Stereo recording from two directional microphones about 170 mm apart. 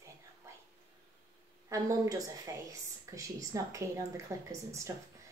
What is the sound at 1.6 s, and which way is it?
A woman's voice, 20° right (ahead or behind).